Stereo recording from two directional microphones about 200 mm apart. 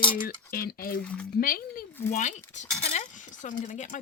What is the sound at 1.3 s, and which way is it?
Speech, 45° left (ahead or behind).